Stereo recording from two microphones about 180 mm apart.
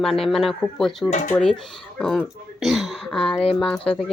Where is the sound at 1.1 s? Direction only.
40° left (ahead or behind).